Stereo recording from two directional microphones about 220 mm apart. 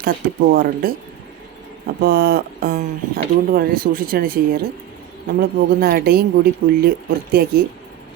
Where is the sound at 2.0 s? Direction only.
40° right (ahead or behind).